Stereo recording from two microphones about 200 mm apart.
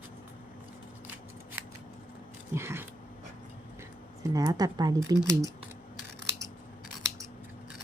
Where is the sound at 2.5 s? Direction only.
10° right (ahead or behind).